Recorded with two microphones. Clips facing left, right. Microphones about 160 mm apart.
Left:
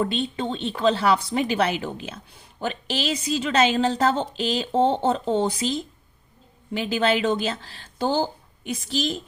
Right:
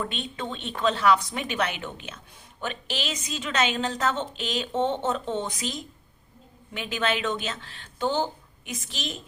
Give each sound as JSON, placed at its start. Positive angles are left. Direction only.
{"t": 0.0, "sound": "a woman's voice", "side_deg": 30}